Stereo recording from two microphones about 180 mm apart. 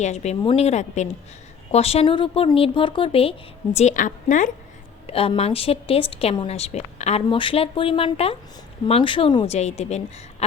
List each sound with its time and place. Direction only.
0.0 s speech: 40° left (ahead or behind)
3.8 s a woman's voice: 45° left (ahead or behind)
5.0 s speech: 30° left (ahead or behind)